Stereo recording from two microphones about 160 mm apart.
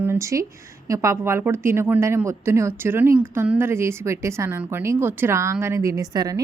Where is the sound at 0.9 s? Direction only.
20° right (ahead or behind).